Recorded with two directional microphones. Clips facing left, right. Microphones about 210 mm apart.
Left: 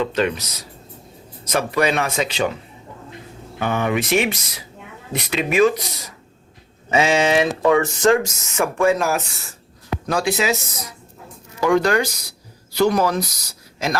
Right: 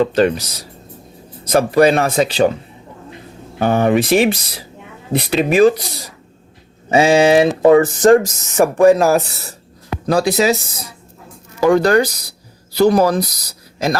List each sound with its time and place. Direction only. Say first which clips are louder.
0.0 s speech: right 7 dB; 35° right (ahead or behind)
3.6 s speech: right 7 dB; 35° right (ahead or behind)